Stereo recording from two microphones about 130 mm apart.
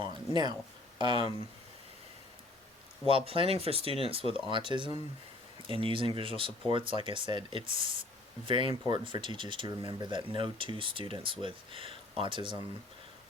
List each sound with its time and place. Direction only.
0.0 s speech: 35° right (ahead or behind)
3.2 s speech: 45° right (ahead or behind)